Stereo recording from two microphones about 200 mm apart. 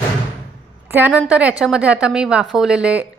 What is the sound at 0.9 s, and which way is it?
A woman's voice, 10° right (ahead or behind).